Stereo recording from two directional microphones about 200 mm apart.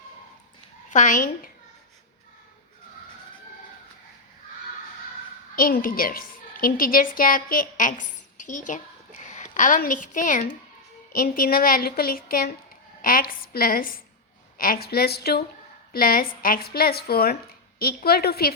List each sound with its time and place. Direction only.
0.9 s a woman's voice: 40° left (ahead or behind)
5.5 s a woman's voice: 45° left (ahead or behind)